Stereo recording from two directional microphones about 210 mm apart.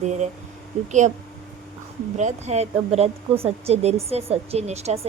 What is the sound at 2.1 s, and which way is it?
Speech, 35° right (ahead or behind).